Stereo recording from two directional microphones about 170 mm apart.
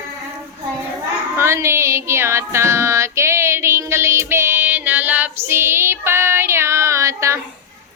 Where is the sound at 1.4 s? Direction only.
15° right (ahead or behind).